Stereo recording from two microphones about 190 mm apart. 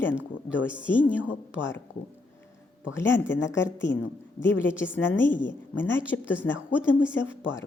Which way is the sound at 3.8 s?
70° left (ahead or behind).